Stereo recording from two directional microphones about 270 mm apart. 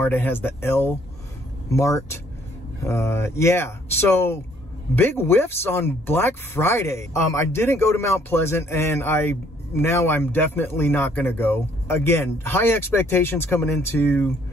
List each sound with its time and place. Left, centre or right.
0.0 s speech: centre